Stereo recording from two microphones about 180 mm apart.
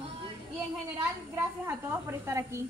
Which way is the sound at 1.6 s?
15° right (ahead or behind).